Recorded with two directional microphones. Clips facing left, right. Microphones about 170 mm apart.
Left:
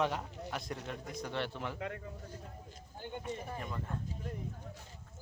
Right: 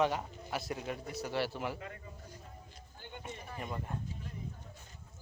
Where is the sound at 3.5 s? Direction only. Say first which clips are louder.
Right 1 dB; 15° right (ahead or behind).